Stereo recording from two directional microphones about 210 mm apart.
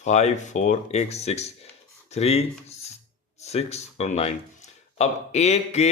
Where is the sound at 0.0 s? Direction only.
30° left (ahead or behind).